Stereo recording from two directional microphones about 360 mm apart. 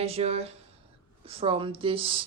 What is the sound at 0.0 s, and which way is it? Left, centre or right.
A woman's voice, centre.